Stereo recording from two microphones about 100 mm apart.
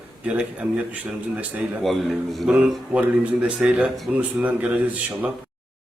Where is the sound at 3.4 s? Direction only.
10° right (ahead or behind).